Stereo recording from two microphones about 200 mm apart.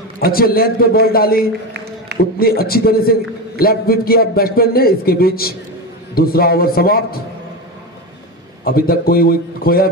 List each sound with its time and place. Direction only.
0.2 s a man's voice: 50° left (ahead or behind)
8.6 s a man's voice: 50° left (ahead or behind)